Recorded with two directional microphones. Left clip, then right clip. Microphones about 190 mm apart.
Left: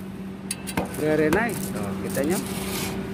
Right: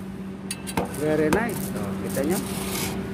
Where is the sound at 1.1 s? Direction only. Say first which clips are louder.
Left 1 dB; 5° left (ahead or behind).